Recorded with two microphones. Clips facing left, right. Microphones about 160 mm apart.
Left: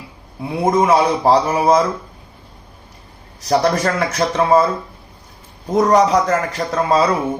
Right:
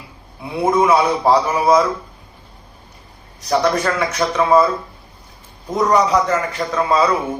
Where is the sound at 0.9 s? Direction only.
30° left (ahead or behind).